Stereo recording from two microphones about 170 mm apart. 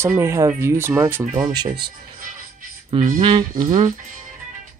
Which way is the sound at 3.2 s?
30° right (ahead or behind).